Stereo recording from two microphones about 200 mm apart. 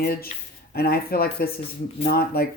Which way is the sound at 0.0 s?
50° left (ahead or behind).